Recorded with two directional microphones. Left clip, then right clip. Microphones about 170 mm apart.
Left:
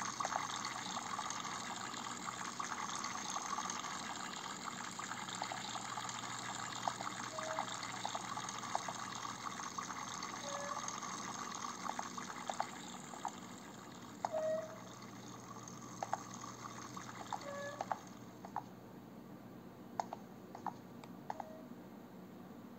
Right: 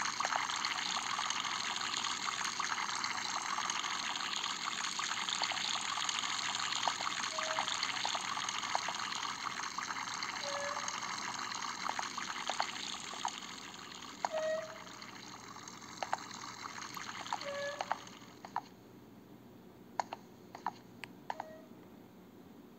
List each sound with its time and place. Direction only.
0.0 s water: 20° right (ahead or behind)
14.2 s a sound: 20° right (ahead or behind)
16.0 s water: 25° right (ahead or behind)